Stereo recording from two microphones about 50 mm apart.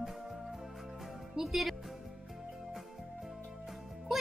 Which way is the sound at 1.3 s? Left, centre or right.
Centre.